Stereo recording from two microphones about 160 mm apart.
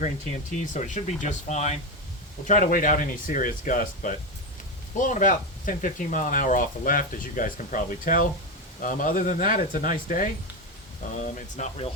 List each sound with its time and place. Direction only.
0.6 s speech: 50° left (ahead or behind)
2.5 s speech: 55° left (ahead or behind)